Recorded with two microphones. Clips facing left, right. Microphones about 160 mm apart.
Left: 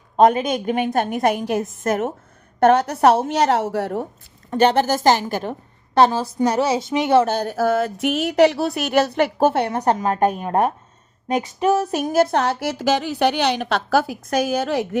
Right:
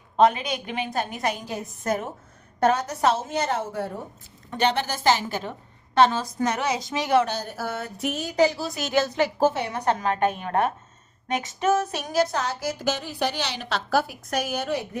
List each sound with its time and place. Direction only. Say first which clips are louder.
0.2 s a woman's voice: left 5 dB; 45° left (ahead or behind); by 2.0 s 90° left
2.6 s speech: left 7 dB; 60° left (ahead or behind); by 4.0 s 85° left
4.5 s a woman's voice: left 8 dB; 45° left (ahead or behind); by 7.3 s 25° left (ahead or behind)
7.4 s speech: left 12 dB; 90° left; by 9.7 s 65° left (ahead or behind)
9.7 s a woman's voice: left 5 dB; 40° left (ahead or behind); by 14.8 s 90° left